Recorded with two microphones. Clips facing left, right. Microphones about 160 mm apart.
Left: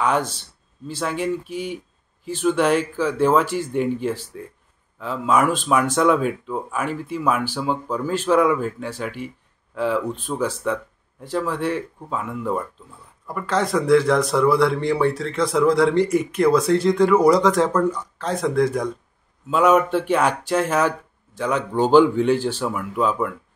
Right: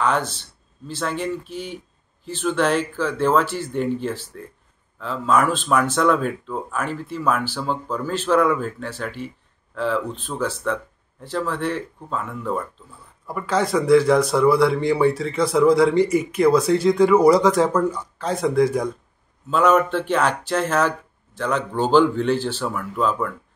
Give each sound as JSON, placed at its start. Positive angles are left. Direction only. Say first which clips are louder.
{"t": 0.0, "sound": "speech", "louder": "left 1 dB", "side_deg": 10}
{"t": 13.3, "sound": "a man's voice", "louder": "right 1 dB", "side_deg": 0}
{"t": 19.5, "sound": "speech", "louder": "left 1 dB", "side_deg": 10}